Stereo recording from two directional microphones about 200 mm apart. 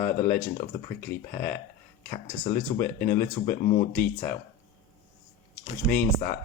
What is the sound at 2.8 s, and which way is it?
Speech, 45° left (ahead or behind).